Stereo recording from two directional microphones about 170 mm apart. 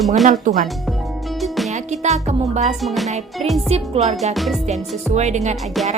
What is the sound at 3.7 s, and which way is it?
Speech, 35° right (ahead or behind).